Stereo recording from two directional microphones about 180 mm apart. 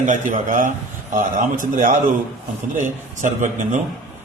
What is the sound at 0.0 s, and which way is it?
A man's voice, 45° right (ahead or behind).